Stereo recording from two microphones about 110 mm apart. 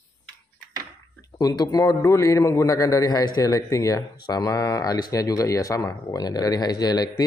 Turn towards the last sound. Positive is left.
turn(degrees=35)  # may be behind; listen again after turning